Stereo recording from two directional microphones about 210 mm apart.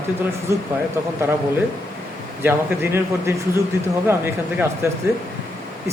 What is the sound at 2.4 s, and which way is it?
Speech, 10° right (ahead or behind).